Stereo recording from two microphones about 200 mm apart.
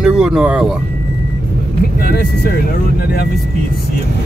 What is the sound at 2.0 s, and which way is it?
Speech, 50° left (ahead or behind).